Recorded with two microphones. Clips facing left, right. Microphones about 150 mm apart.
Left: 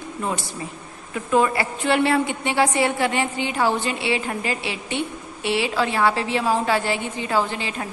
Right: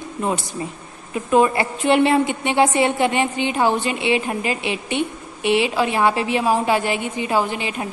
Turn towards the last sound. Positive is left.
turn(degrees=-15)  # may be behind; listen again after turning